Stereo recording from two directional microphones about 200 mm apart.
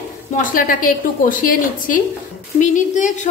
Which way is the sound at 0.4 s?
45° left (ahead or behind).